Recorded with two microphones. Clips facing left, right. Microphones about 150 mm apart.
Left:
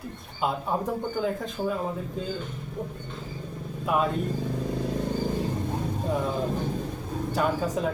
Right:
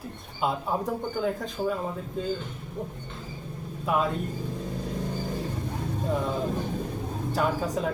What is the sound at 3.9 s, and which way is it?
Speech, centre (ahead or behind).